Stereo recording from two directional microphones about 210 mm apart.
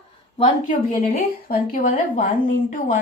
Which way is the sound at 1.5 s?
35° left (ahead or behind).